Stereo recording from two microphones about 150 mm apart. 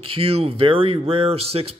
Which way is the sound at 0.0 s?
40° right (ahead or behind).